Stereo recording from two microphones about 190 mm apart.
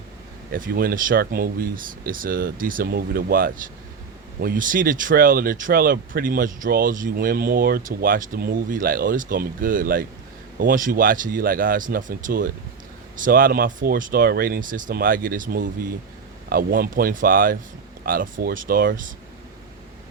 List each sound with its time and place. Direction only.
0.5 s speech: 50° right (ahead or behind)